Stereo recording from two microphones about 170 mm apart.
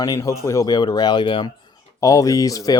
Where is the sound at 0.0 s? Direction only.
20° left (ahead or behind).